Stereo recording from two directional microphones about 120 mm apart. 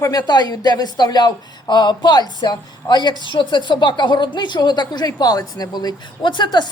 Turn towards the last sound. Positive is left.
turn(degrees=40)  # may be behind; listen again after turning